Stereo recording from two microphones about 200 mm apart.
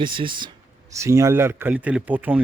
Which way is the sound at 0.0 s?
25° right (ahead or behind).